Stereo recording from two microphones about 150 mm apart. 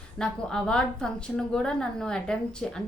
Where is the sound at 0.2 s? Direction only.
5° left (ahead or behind).